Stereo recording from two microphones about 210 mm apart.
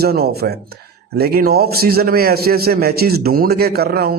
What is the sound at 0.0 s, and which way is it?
A man's voice, 50° right (ahead or behind).